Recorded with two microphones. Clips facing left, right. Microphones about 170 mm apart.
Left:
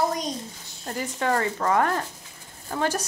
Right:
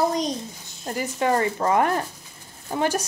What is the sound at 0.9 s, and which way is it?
A woman's voice, 15° right (ahead or behind).